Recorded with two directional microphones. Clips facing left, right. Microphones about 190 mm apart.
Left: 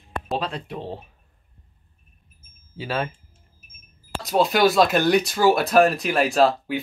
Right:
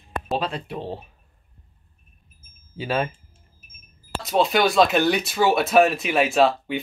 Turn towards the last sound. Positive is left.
turn(degrees=0)  # may be behind; listen again after turning